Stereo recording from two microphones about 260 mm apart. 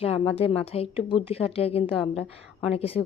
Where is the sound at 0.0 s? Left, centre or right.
Left.